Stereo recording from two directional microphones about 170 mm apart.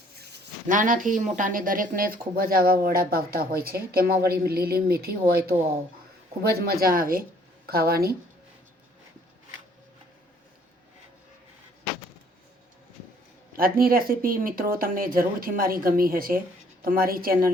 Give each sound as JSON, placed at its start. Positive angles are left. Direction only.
{"t": 0.7, "sound": "speech", "side_deg": -50}
{"t": 13.5, "sound": "speech", "side_deg": -60}